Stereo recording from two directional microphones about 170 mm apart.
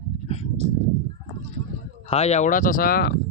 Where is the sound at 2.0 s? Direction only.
35° left (ahead or behind); by 3.1 s 60° left (ahead or behind).